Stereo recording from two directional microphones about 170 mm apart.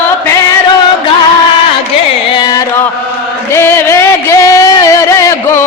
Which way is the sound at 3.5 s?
15° left (ahead or behind).